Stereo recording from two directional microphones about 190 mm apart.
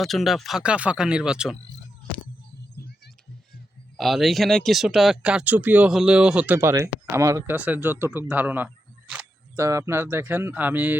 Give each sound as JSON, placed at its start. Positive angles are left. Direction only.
{"t": 0.0, "sound": "speech", "side_deg": 0}
{"t": 2.8, "sound": "a sound", "side_deg": 55}
{"t": 3.9, "sound": "speech", "side_deg": 0}